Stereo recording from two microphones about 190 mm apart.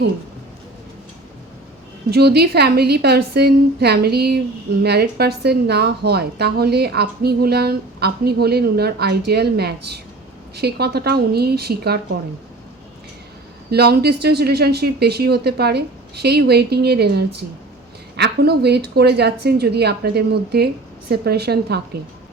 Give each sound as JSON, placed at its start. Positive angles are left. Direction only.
{"t": 2.0, "sound": "a woman's voice", "side_deg": -60}
{"t": 13.7, "sound": "a woman's voice", "side_deg": -60}